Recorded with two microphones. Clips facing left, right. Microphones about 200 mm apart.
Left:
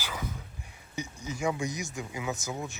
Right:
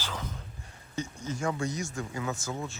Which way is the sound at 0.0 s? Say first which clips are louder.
Left 1 dB; 10° left (ahead or behind).